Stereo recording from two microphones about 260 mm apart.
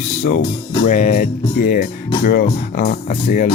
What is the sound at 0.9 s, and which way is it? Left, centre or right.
Speech, left.